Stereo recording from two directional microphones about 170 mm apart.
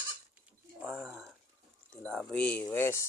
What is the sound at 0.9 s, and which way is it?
Speech, 10° right (ahead or behind).